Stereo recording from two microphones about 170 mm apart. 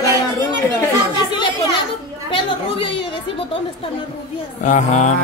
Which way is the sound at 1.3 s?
25° left (ahead or behind).